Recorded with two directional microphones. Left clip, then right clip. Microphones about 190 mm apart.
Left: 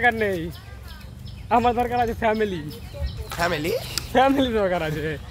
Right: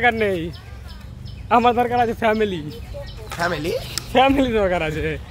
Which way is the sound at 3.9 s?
15° right (ahead or behind).